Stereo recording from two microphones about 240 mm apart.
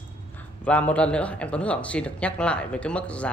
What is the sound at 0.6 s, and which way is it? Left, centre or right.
Speech, centre.